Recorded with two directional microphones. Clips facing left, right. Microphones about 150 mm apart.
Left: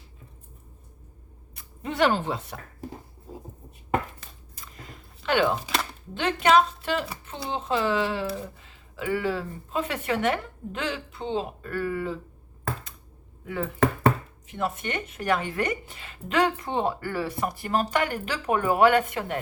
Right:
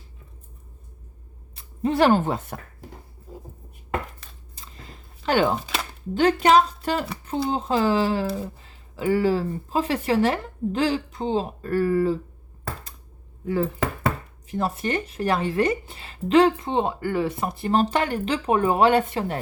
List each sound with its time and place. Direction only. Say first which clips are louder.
1.5 s speech: right 5 dB; 35° right (ahead or behind)
4.5 s chewing: even; 30° right (ahead or behind)
6.1 s speech: right 4 dB; 40° right (ahead or behind)
13.4 s speech: right 1 dB; 30° right (ahead or behind)